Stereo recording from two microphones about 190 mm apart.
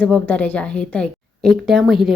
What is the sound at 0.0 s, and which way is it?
Speech, 5° left (ahead or behind).